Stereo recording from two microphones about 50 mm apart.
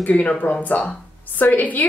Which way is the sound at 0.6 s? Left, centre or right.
Left.